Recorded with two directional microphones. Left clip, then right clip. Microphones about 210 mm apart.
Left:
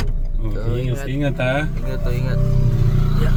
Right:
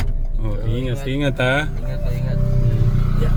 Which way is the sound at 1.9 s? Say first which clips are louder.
Left 3 dB; 55° left (ahead or behind).